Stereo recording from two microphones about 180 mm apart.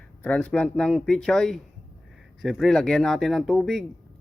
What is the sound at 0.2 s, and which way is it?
Speech, 5° left (ahead or behind).